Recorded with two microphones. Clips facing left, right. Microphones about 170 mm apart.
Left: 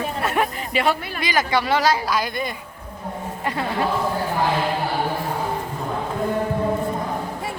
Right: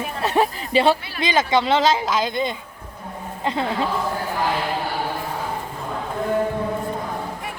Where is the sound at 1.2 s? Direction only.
25° right (ahead or behind).